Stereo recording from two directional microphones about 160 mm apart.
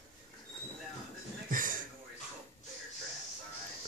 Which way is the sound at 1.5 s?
55° right (ahead or behind).